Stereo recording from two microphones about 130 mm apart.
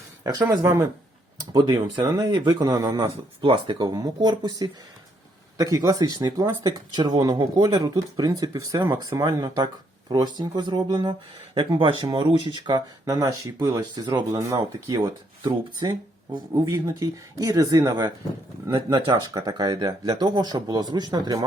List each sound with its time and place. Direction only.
0.3 s speech: 25° right (ahead or behind)
3.4 s speech: 40° right (ahead or behind)
18.7 s speech: 40° right (ahead or behind)